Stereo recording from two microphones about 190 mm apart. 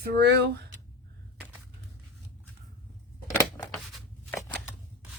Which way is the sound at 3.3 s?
15° left (ahead or behind).